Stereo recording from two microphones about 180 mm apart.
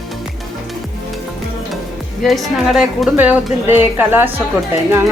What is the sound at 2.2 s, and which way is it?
A woman's voice, centre (ahead or behind).